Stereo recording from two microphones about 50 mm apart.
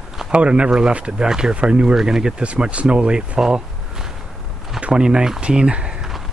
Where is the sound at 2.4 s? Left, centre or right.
Right.